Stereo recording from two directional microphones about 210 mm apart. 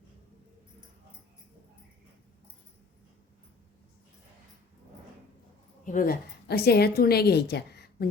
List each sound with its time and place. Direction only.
5.8 s a woman's voice: 40° left (ahead or behind)